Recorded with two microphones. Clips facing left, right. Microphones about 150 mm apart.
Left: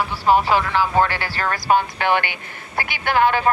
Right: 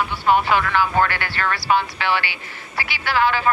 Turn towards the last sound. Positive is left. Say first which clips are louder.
# left 2 dB
turn(degrees=50)  # may be behind; listen again after turning